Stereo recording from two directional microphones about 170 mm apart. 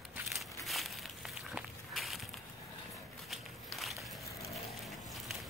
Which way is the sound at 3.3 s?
Centre (ahead or behind).